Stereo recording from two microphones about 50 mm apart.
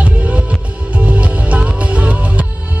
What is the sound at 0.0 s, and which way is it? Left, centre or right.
Music, right.